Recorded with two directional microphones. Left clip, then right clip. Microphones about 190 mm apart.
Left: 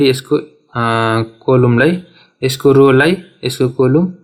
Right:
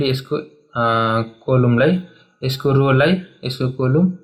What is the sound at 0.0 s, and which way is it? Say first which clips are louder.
Speech: left 8 dB; 50° left (ahead or behind).